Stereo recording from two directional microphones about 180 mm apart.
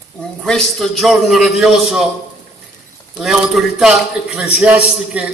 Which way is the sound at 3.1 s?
Centre (ahead or behind).